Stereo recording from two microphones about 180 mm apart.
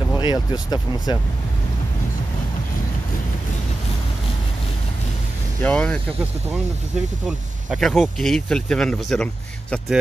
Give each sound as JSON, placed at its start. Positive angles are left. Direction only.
{"t": 0.2, "sound": "speech", "side_deg": 25}
{"t": 5.6, "sound": "speech", "side_deg": 5}
{"t": 7.2, "sound": "speech", "side_deg": 0}